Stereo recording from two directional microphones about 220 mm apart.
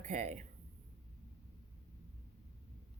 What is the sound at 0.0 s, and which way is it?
Speech, 30° right (ahead or behind).